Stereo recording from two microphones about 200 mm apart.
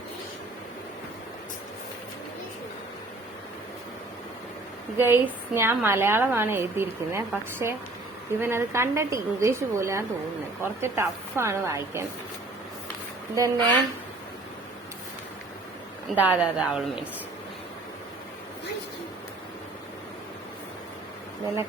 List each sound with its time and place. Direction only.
4.9 s a woman's voice: 10° right (ahead or behind)
13.3 s a woman's voice: 15° right (ahead or behind)
16.0 s a woman's voice: 10° right (ahead or behind)